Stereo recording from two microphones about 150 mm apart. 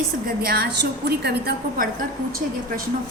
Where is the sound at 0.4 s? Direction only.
90° right; by 2.8 s 70° right (ahead or behind).